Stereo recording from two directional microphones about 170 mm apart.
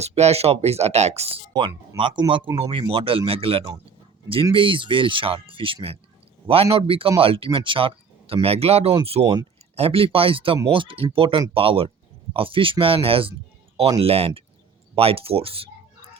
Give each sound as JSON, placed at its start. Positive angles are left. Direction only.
{"t": 0.0, "sound": "speech", "side_deg": -40}
{"t": 9.2, "sound": "speech", "side_deg": -25}
{"t": 9.7, "sound": "speech", "side_deg": -35}